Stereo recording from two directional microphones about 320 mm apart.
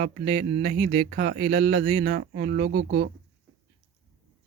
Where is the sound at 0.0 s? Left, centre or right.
Right.